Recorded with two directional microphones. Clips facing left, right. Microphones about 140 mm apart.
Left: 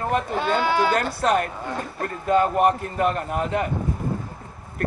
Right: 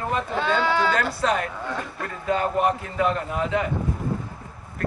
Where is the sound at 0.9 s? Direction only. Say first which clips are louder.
Left 2 dB; 55° left (ahead or behind).